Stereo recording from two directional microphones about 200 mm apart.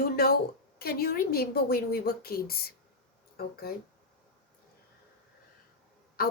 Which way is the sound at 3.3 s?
50° left (ahead or behind).